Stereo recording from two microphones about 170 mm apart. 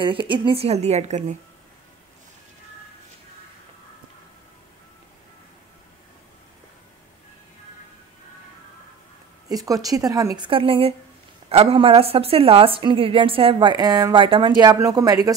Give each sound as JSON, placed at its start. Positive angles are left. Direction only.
{"t": 0.0, "sound": "a woman's voice", "side_deg": -30}
{"t": 9.5, "sound": "a woman's voice", "side_deg": -20}